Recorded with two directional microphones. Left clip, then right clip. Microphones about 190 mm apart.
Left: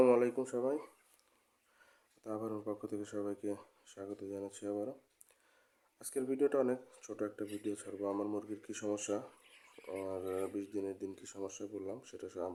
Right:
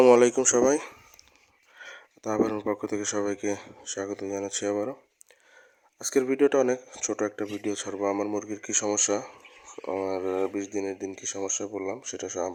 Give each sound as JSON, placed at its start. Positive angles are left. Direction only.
{"t": 0.0, "sound": "speech", "side_deg": -35}
{"t": 6.0, "sound": "speech", "side_deg": -30}